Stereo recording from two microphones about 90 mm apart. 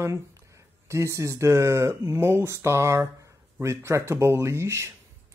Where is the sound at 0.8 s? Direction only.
30° right (ahead or behind).